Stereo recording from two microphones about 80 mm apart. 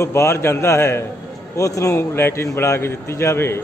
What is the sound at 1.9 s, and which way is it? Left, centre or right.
A man's voice, left.